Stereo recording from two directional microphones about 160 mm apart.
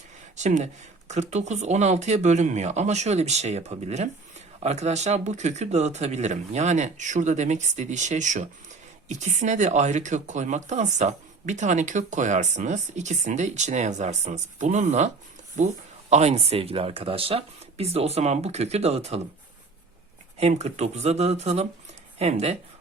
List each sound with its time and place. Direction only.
0.3 s speech: 45° right (ahead or behind)
20.4 s speech: 45° right (ahead or behind)